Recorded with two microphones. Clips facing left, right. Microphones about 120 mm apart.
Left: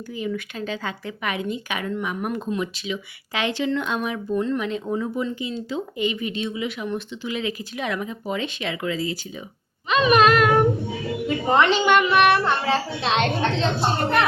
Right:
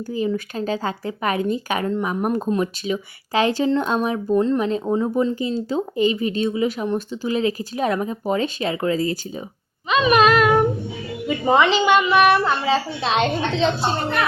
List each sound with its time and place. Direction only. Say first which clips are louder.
0.1 s speech: right 5 dB; 35° right (ahead or behind)
9.9 s a woman's voice: right 1 dB; centre (ahead or behind)